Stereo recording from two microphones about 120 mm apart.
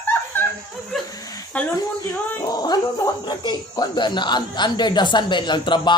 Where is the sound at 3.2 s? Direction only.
35° left (ahead or behind).